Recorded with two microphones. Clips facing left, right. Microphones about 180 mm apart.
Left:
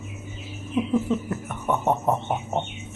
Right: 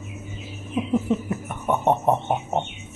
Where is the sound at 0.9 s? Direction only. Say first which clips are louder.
Right 3 dB; 15° right (ahead or behind).